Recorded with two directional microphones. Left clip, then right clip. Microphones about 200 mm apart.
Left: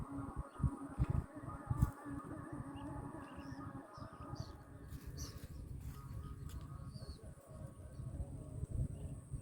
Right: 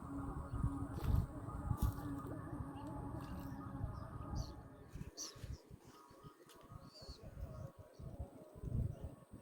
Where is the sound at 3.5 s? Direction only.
45° left (ahead or behind).